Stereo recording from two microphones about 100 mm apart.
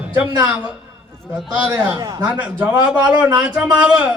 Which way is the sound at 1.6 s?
20° right (ahead or behind).